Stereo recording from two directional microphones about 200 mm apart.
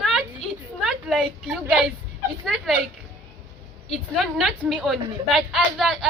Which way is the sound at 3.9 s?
Centre (ahead or behind).